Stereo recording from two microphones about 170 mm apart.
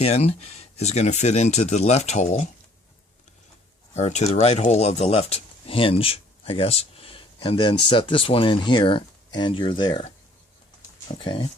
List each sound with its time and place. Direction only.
0.0 s speech: 35° left (ahead or behind)
3.9 s speech: 40° left (ahead or behind)
11.2 s speech: 30° left (ahead or behind)